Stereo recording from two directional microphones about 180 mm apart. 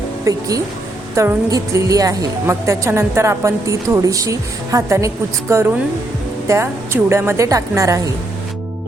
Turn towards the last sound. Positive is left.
turn(degrees=-15)  # may be behind; listen again after turning